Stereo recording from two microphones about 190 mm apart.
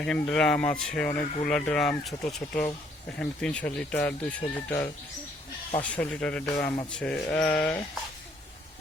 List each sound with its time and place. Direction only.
0.0 s speech: 5° left (ahead or behind)